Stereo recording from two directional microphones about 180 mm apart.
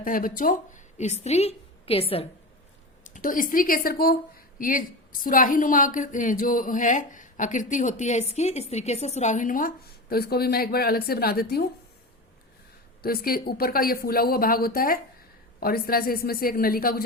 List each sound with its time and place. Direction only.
0.0 s speech: 50° left (ahead or behind); by 2.2 s 30° left (ahead or behind)
3.0 s a woman's voice: 45° left (ahead or behind)
13.0 s a woman's voice: 55° left (ahead or behind)